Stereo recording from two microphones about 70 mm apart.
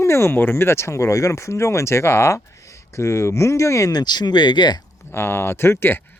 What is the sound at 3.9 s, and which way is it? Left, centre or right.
Speech, left.